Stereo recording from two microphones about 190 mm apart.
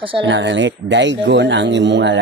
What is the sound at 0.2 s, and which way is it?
Speech, 70° right (ahead or behind).